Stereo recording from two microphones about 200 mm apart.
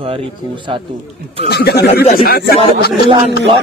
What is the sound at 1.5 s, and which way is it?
Speech, 50° left (ahead or behind).